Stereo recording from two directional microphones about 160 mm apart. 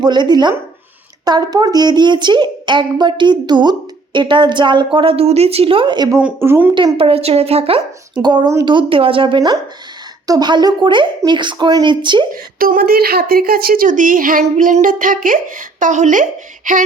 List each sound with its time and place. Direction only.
0.0 s speech: 25° right (ahead or behind)
6.1 s speech: 10° right (ahead or behind)
6.7 s speech: 35° right (ahead or behind)
12.3 s speech: 65° right (ahead or behind)